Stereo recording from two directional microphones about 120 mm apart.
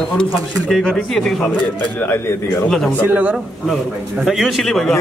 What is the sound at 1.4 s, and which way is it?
A man's voice, 15° left (ahead or behind).